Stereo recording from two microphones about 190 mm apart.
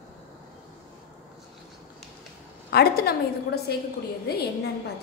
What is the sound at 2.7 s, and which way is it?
Speech, 55° left (ahead or behind).